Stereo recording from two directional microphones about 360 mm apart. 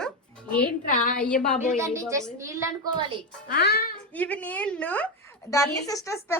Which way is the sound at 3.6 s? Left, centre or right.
Left.